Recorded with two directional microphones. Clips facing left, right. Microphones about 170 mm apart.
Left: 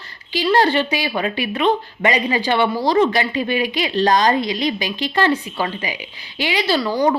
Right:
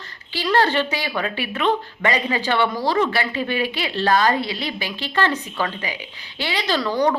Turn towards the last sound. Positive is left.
turn(degrees=10)  # may be behind; listen again after turning